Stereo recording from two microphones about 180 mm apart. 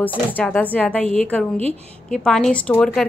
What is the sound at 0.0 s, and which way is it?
A woman's voice, 10° left (ahead or behind).